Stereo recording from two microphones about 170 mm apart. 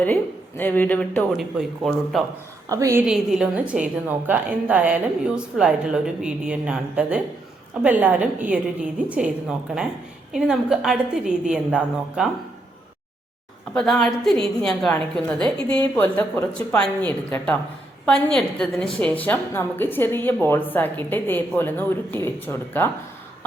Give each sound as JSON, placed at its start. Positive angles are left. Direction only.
{"t": 0.0, "sound": "a woman's voice", "side_deg": 10}
{"t": 2.6, "sound": "a woman's voice", "side_deg": -20}
{"t": 3.0, "sound": "a woman's voice", "side_deg": -5}
{"t": 13.7, "sound": "a woman's voice", "side_deg": 0}